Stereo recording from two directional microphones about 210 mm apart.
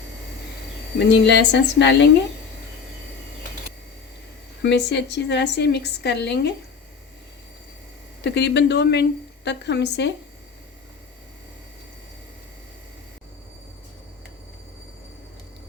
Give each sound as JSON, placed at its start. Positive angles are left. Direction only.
{"t": 0.9, "sound": "a woman's voice", "side_deg": 55}
{"t": 4.6, "sound": "a woman's voice", "side_deg": 55}
{"t": 8.2, "sound": "a woman's voice", "side_deg": 55}